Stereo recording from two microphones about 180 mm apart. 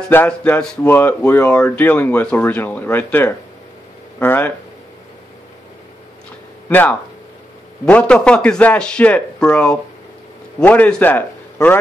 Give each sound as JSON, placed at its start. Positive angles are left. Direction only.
{"t": 0.1, "sound": "speech", "side_deg": 10}
{"t": 6.7, "sound": "a man's voice", "side_deg": 10}